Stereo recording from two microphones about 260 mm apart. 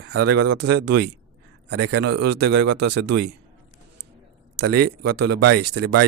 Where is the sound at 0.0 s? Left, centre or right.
Right.